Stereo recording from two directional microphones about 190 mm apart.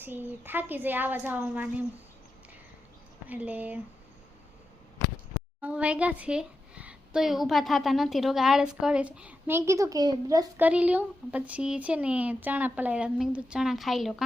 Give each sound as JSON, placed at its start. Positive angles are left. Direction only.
{"t": 0.0, "sound": "speech", "side_deg": -10}
{"t": 3.2, "sound": "speech", "side_deg": -10}
{"t": 5.5, "sound": "a woman's voice", "side_deg": -5}
{"t": 10.6, "sound": "speech", "side_deg": -5}